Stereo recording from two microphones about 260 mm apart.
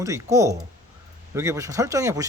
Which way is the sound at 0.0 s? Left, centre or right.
Centre.